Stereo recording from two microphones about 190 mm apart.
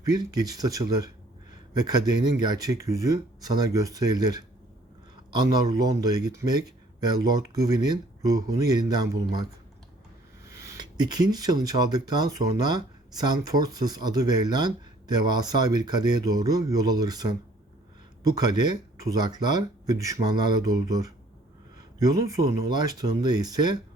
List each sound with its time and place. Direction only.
0.0 s a man's voice: 20° right (ahead or behind)